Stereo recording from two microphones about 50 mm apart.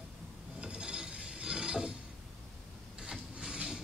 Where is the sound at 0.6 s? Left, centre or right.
Centre.